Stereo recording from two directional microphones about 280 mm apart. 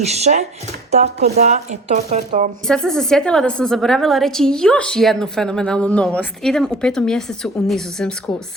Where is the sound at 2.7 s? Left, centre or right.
Centre.